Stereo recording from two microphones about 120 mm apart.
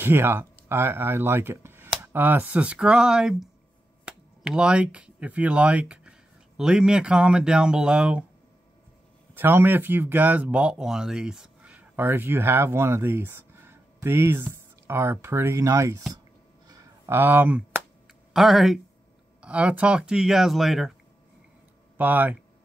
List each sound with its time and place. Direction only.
0.0 s speech: 20° right (ahead or behind)
9.3 s speech: 20° right (ahead or behind)
16.6 s a sound: 30° right (ahead or behind); by 18.8 s centre (ahead or behind)
19.4 s speech: 10° right (ahead or behind)
21.9 s speech: 15° right (ahead or behind)